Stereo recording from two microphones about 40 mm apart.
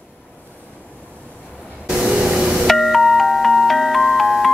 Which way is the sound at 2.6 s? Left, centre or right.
Centre.